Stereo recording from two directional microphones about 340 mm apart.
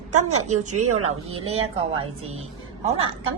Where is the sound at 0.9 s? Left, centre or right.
Centre.